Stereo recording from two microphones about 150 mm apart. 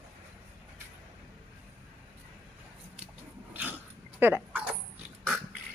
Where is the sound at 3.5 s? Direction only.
10° right (ahead or behind).